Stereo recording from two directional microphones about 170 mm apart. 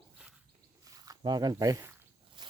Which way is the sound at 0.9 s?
20° right (ahead or behind).